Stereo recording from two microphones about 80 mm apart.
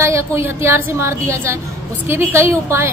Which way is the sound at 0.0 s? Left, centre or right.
Right.